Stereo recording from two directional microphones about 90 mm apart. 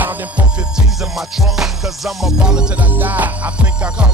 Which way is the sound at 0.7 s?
5° right (ahead or behind).